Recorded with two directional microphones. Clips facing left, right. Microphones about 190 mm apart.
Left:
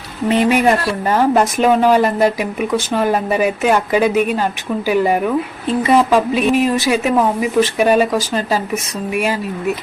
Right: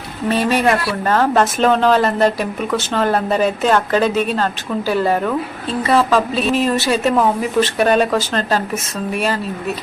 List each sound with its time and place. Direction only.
0.3 s speech: 15° left (ahead or behind)